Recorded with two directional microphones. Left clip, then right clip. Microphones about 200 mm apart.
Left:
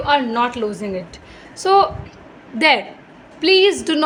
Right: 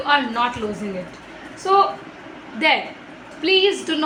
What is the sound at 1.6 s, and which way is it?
Speech, 60° left (ahead or behind).